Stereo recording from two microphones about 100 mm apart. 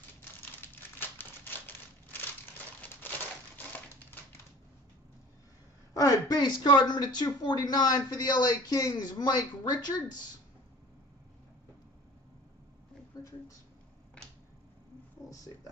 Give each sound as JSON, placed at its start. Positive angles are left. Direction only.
{"t": 0.6, "sound": "crumpling", "side_deg": 20}
{"t": 2.8, "sound": "crushing", "side_deg": 20}
{"t": 5.9, "sound": "speech", "side_deg": 35}
{"t": 13.1, "sound": "a sound", "side_deg": 40}